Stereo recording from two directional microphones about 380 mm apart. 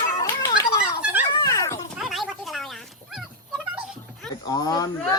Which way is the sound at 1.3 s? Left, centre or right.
Centre.